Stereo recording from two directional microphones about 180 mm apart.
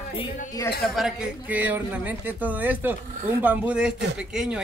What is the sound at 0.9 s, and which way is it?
Speech, 5° right (ahead or behind).